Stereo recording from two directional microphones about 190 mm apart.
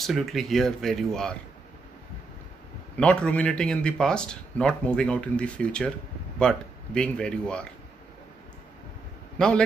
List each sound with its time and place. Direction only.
0.0 s speech: centre (ahead or behind)
3.0 s speech: 5° left (ahead or behind)
9.4 s speech: 5° left (ahead or behind)